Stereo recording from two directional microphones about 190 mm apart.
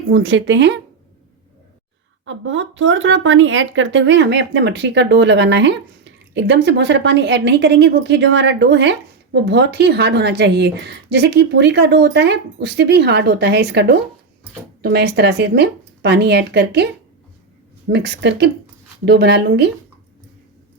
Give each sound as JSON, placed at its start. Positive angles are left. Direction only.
{"t": 0.1, "sound": "speech", "side_deg": -80}
{"t": 2.2, "sound": "a woman's voice", "side_deg": -85}